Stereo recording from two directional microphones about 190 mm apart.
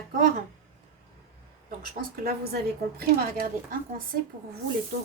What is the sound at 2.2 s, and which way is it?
Speech, 55° right (ahead or behind).